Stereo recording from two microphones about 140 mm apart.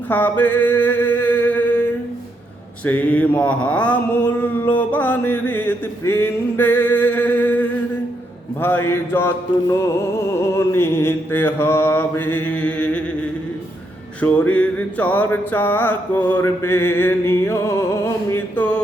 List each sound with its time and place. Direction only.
0.1 s a sound: 10° left (ahead or behind)
2.8 s mantra: 10° left (ahead or behind)
14.2 s mantra: 10° left (ahead or behind)